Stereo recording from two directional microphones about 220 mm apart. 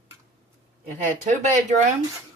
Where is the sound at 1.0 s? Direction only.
35° right (ahead or behind).